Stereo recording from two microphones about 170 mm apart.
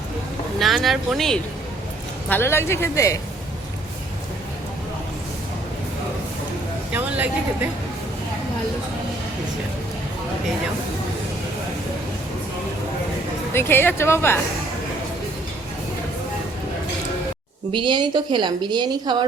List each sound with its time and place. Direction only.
0.6 s speech: centre (ahead or behind)
2.3 s speech: 15° left (ahead or behind)
6.9 s speech: 10° right (ahead or behind)
13.5 s speech: 15° left (ahead or behind)
17.7 s a woman's voice: 30° right (ahead or behind)